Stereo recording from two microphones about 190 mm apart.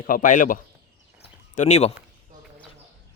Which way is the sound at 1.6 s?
35° left (ahead or behind).